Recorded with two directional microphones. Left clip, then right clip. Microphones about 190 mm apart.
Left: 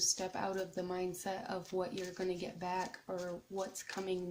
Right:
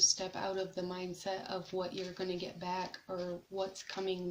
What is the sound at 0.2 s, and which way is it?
Speech, 40° left (ahead or behind).